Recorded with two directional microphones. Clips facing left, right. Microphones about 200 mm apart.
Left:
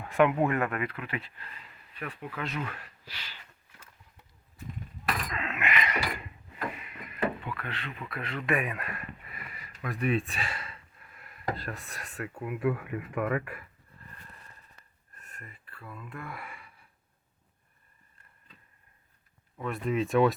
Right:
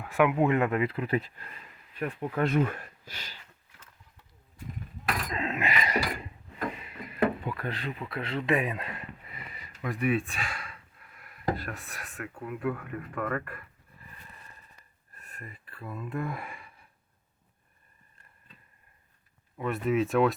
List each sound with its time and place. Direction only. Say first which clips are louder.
0.0 s speech: even; 5° right (ahead or behind); by 3.3 s 45° right (ahead or behind)
5.3 s a sound: right 2 dB; 35° right (ahead or behind)
10.0 s speech: right 1 dB; 5° right (ahead or behind)
15.1 s a sound: right 4 dB; 10° right (ahead or behind)
15.8 s speech: right 8 dB; 20° right (ahead or behind)
19.5 s speech: right 3 dB; 5° right (ahead or behind)